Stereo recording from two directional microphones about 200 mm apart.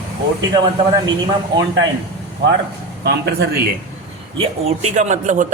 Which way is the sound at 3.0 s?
55° right (ahead or behind).